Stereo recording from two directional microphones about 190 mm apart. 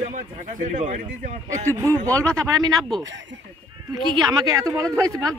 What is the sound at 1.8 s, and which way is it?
A man's voice, 15° right (ahead or behind).